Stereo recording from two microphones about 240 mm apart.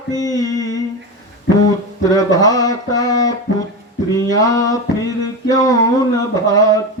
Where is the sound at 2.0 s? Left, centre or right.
Centre.